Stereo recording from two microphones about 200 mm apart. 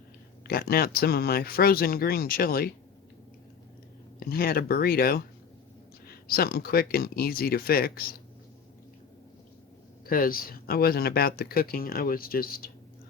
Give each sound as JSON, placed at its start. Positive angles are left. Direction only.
{"t": 0.4, "sound": "speech", "side_deg": 50}
{"t": 4.2, "sound": "speech", "side_deg": 50}
{"t": 10.1, "sound": "speech", "side_deg": 45}